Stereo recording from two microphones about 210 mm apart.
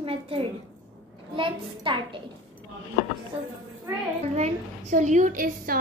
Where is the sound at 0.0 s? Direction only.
25° right (ahead or behind).